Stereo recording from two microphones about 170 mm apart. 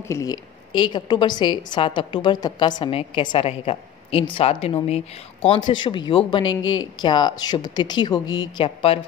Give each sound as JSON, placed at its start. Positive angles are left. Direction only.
{"t": 0.1, "sound": "a woman's voice", "side_deg": 20}